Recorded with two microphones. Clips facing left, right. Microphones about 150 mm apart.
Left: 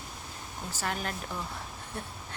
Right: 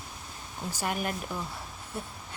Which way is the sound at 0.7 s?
15° right (ahead or behind).